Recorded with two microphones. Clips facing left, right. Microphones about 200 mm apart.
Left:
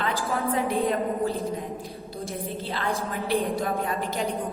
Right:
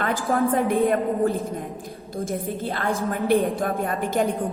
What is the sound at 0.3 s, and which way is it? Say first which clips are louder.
A woman's voice: right 6 dB; 50° right (ahead or behind).